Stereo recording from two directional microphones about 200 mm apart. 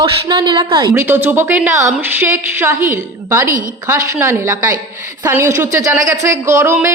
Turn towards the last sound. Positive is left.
turn(degrees=-15)  # may be behind; listen again after turning